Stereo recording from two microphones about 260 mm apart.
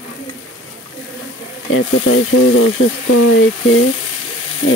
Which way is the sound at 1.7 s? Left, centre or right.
Left.